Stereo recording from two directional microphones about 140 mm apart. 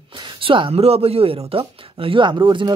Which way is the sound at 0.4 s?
40° right (ahead or behind).